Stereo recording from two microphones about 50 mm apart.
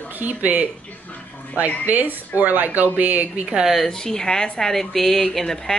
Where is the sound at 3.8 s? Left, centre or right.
Centre.